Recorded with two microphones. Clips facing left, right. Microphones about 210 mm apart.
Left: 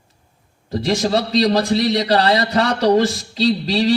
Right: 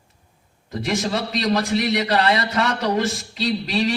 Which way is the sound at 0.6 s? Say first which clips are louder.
Left 5 dB; 35° left (ahead or behind).